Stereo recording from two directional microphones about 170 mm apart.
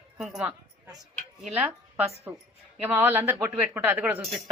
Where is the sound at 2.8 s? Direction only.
10° right (ahead or behind).